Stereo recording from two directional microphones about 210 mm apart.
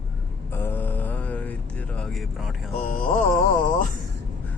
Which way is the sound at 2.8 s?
35° left (ahead or behind).